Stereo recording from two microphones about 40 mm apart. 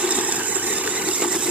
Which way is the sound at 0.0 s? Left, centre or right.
Right.